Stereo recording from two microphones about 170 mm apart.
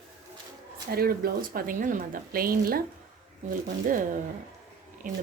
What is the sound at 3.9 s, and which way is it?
Speech, 50° right (ahead or behind).